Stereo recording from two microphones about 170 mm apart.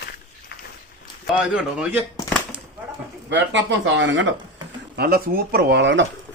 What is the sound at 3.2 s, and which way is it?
Speech, 90° right.